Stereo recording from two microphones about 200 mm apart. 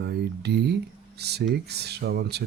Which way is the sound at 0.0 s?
55° right (ahead or behind).